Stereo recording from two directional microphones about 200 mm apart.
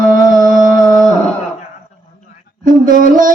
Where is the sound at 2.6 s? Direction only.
45° right (ahead or behind).